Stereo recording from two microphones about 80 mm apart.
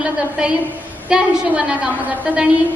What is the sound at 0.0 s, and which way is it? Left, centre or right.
A woman's voice, centre.